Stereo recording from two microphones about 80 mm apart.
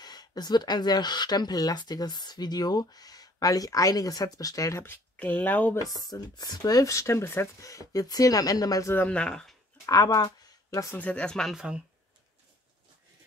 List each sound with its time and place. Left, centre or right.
0.0 s speech: left
4.8 s speech: left
6.0 s speech: left
7.6 s speech: left
9.0 s speech: centre
9.8 s speech: left
11.0 s speech: centre
11.5 s speech: centre